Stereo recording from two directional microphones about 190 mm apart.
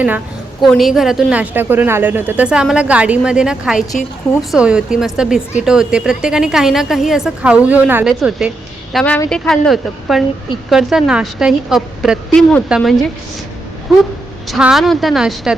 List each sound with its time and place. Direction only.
0.6 s a woman's voice: centre (ahead or behind)
14.4 s a woman's voice: centre (ahead or behind)